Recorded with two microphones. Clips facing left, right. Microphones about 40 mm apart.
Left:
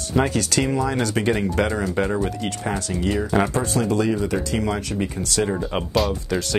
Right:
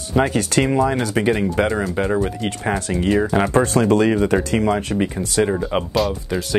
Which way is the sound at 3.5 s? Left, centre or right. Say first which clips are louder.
Right 6 dB; right.